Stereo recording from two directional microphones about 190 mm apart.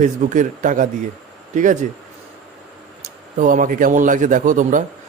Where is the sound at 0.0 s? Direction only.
40° right (ahead or behind).